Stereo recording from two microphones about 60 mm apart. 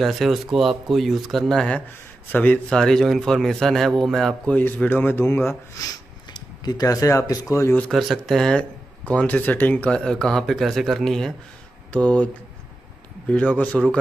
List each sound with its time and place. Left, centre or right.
0.0 s a man's voice: centre
2.3 s speech: left
2.7 s a man's voice: centre
4.5 s speech: left
6.8 s speech: left
7.9 s a man's voice: centre
8.5 s speech: left; by 11.3 s centre
11.9 s speech: left
13.3 s speech: left